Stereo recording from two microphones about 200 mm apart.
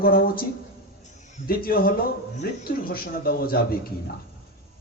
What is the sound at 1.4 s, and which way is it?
A man's voice, 45° left (ahead or behind).